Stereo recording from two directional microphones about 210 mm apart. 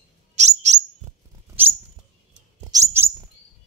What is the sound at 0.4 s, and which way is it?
Bird, 35° right (ahead or behind).